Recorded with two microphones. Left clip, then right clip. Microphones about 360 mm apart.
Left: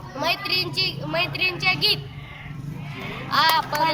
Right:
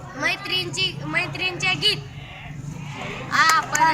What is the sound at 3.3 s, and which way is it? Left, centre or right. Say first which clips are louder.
Speech: right 1 dB; centre.